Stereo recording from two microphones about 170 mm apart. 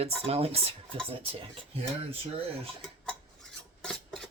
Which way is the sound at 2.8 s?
5° left (ahead or behind).